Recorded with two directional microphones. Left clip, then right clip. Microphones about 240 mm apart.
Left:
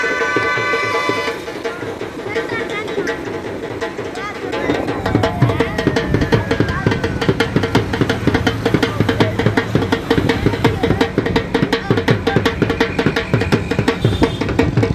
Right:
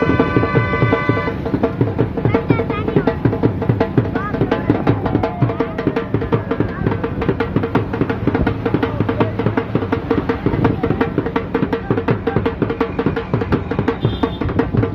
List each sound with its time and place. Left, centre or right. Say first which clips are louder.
8.3 s music: left 1 dB; left